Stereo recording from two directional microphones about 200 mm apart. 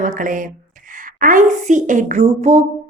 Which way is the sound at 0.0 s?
40° right (ahead or behind).